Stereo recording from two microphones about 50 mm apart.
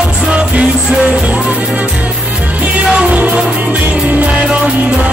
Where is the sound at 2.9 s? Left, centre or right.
Right.